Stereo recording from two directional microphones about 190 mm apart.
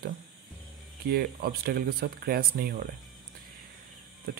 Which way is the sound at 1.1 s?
55° right (ahead or behind).